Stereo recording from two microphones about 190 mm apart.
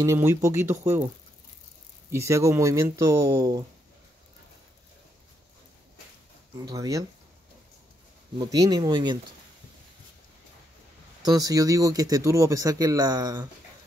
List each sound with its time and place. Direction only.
0.0 s speech: 15° right (ahead or behind)
2.0 s speech: 15° right (ahead or behind)
6.6 s speech: 20° right (ahead or behind)
8.4 s speech: 20° right (ahead or behind)
11.2 s speech: 20° right (ahead or behind)